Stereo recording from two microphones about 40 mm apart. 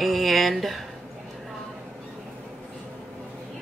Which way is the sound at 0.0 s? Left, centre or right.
Centre.